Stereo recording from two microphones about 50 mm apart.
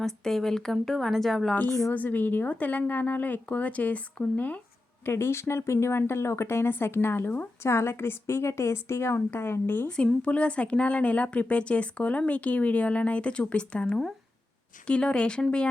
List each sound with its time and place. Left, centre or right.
0.0 s a woman's voice: centre
1.9 s speech: left
5.0 s a woman's voice: left
7.6 s a woman's voice: left
10.2 s a woman's voice: left